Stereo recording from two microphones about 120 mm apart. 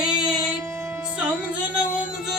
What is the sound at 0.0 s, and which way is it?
Music, 5° right (ahead or behind).